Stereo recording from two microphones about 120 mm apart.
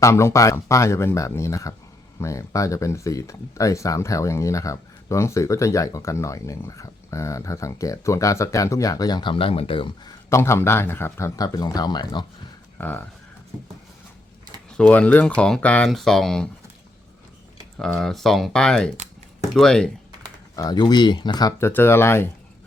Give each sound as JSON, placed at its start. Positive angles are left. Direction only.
{"t": 0.0, "sound": "speech", "side_deg": 25}
{"t": 10.2, "sound": "speech", "side_deg": 25}
{"t": 12.8, "sound": "speech", "side_deg": 15}
{"t": 14.8, "sound": "speech", "side_deg": 10}
{"t": 17.7, "sound": "speech", "side_deg": 5}
{"t": 20.6, "sound": "speech", "side_deg": 35}
{"t": 21.6, "sound": "speech", "side_deg": 20}